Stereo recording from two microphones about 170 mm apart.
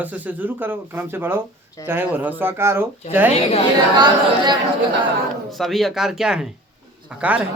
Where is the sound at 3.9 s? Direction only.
25° right (ahead or behind).